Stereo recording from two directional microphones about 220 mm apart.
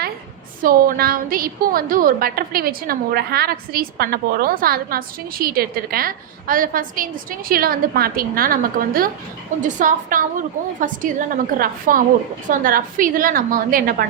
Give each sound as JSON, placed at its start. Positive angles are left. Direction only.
{"t": 0.6, "sound": "a woman's voice", "side_deg": -40}